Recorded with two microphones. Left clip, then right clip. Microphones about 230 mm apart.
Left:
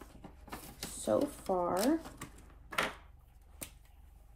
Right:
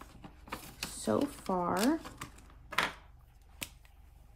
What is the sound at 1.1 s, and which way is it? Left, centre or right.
Speech, right.